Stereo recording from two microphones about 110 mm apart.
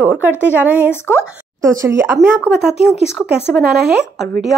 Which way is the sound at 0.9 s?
25° left (ahead or behind).